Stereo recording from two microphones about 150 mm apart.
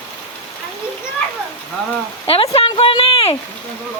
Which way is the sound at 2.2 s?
40° left (ahead or behind).